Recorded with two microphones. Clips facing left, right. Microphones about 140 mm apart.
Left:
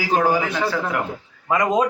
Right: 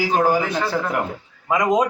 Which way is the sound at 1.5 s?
15° right (ahead or behind).